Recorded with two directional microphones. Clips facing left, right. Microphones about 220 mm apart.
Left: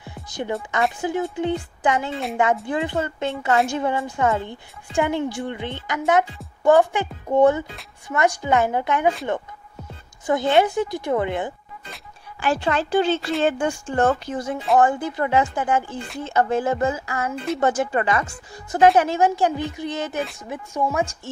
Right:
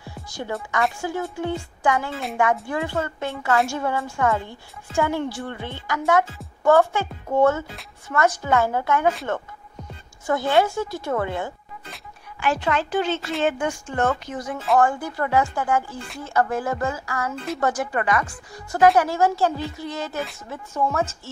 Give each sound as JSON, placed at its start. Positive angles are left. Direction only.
{"t": 0.0, "sound": "a woman's voice", "side_deg": 20}
{"t": 10.2, "sound": "a woman's voice", "side_deg": 20}
{"t": 12.4, "sound": "a woman's voice", "side_deg": 35}